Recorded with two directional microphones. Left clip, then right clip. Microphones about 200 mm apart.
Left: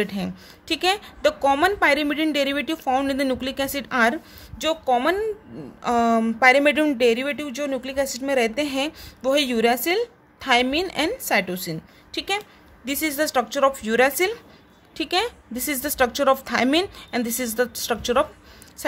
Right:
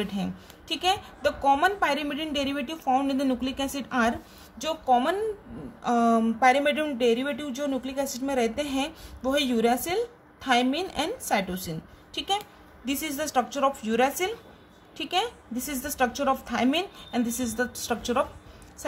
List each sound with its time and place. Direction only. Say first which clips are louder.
0.0 s speech: left 6 dB; 40° left (ahead or behind)